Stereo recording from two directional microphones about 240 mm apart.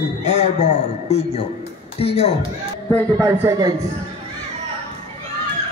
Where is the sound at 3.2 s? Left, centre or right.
Centre.